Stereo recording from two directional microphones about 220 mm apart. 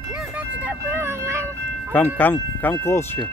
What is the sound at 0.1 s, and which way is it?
Speech, 10° right (ahead or behind).